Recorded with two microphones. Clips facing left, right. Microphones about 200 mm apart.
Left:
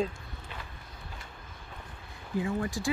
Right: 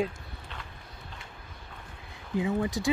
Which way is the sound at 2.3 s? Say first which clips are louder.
Right 3 dB; 20° right (ahead or behind).